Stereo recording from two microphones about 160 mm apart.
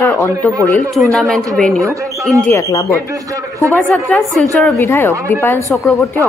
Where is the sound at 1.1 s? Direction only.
5° left (ahead or behind).